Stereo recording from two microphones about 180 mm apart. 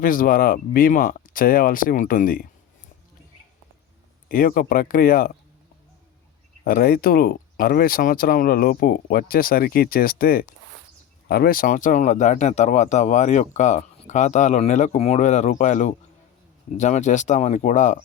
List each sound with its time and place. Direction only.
0.0 s speech: 50° left (ahead or behind)
4.3 s speech: 50° left (ahead or behind)
6.7 s speech: 55° left (ahead or behind)